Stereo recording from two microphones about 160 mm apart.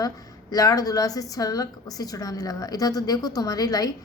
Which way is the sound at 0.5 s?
25° left (ahead or behind).